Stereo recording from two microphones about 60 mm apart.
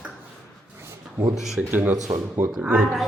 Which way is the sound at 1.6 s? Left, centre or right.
Right.